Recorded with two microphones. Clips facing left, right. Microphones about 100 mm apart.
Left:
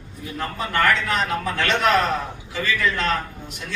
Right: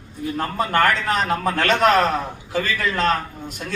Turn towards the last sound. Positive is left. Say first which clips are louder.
# right 3 dB
turn(degrees=-40)  # may be behind; listen again after turning